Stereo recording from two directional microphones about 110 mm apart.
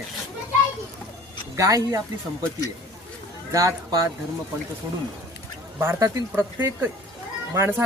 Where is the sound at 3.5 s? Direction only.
30° right (ahead or behind).